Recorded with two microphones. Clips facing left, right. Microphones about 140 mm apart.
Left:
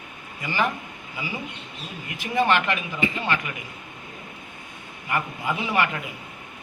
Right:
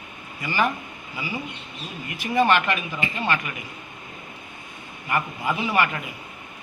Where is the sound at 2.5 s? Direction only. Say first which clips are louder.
Right 1 dB; 15° right (ahead or behind).